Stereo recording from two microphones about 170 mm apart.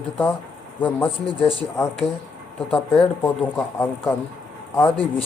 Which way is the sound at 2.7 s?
5° left (ahead or behind).